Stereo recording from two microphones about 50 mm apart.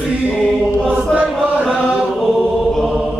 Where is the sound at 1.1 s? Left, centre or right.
Centre.